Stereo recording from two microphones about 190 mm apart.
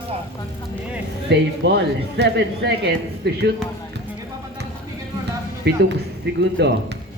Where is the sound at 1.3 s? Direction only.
60° right (ahead or behind).